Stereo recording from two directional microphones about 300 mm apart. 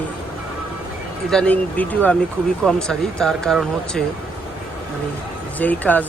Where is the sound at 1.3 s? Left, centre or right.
Centre.